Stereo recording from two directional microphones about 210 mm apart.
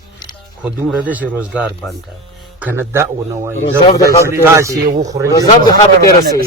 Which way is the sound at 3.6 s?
25° left (ahead or behind).